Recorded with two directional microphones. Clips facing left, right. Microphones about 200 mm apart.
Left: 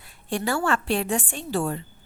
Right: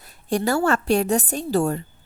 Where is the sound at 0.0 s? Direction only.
40° right (ahead or behind).